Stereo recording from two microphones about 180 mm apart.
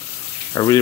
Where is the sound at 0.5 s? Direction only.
20° left (ahead or behind).